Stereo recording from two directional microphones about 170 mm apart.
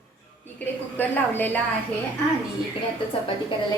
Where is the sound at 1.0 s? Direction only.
10° left (ahead or behind).